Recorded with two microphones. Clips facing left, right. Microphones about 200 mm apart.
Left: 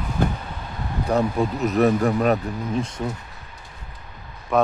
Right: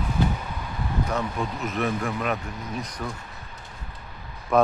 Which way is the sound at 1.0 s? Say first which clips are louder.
Left 10 dB; 35° left (ahead or behind).